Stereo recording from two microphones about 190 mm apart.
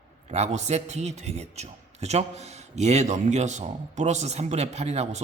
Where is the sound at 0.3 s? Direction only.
35° right (ahead or behind).